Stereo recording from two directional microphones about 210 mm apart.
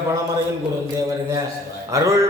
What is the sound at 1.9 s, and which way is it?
Speech, 15° right (ahead or behind).